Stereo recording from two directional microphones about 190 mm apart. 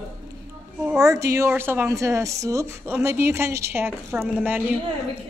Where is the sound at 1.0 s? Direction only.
15° right (ahead or behind).